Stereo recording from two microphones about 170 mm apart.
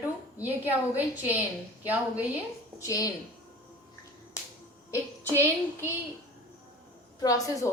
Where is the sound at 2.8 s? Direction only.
20° left (ahead or behind).